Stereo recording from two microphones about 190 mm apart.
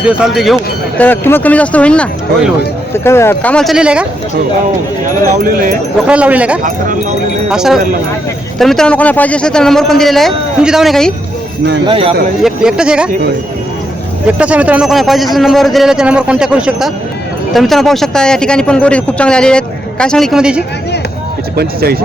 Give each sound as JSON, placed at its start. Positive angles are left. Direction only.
{"t": 0.1, "sound": "speech", "side_deg": 0}
{"t": 5.4, "sound": "speech", "side_deg": -50}
{"t": 6.1, "sound": "speech", "side_deg": -5}
{"t": 6.6, "sound": "speech", "side_deg": -45}
{"t": 7.5, "sound": "a man's voice", "side_deg": -5}
{"t": 11.9, "sound": "speech", "side_deg": -30}
{"t": 12.4, "sound": "a man's voice", "side_deg": -5}
{"t": 14.3, "sound": "a man's voice", "side_deg": -5}
{"t": 21.5, "sound": "speech", "side_deg": -55}